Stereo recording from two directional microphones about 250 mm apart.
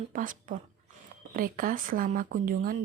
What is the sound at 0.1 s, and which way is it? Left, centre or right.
Speech, right.